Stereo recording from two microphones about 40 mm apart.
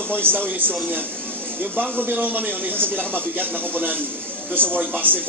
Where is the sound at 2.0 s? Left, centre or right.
Right.